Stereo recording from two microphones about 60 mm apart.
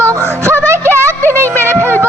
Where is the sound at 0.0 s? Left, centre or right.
Right.